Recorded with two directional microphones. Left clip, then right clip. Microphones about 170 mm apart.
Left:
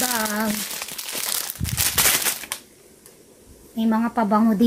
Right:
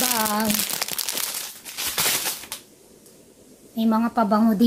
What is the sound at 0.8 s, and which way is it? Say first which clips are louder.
Crumpling: right 5 dB; 65° right (ahead or behind).